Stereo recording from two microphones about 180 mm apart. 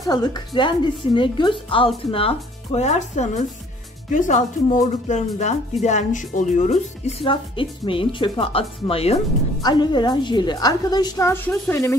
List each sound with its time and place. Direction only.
0.0 s a woman's voice: 25° left (ahead or behind)